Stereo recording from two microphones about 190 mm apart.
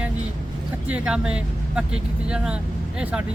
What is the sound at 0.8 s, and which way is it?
Speech, 5° right (ahead or behind).